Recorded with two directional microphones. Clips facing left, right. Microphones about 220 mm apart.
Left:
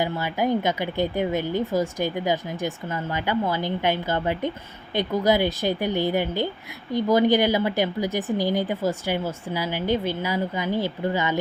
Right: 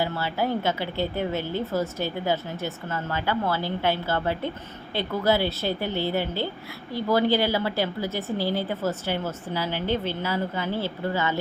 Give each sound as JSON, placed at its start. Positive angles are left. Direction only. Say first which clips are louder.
{"t": 0.0, "sound": "a woman's voice", "louder": "left 2 dB", "side_deg": 15}